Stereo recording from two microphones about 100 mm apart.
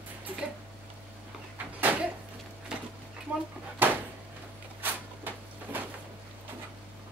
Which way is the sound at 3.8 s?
20° right (ahead or behind).